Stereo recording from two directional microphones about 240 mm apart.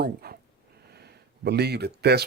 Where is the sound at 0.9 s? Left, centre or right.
Right.